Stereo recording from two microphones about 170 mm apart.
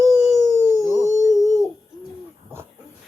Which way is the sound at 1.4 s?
20° right (ahead or behind).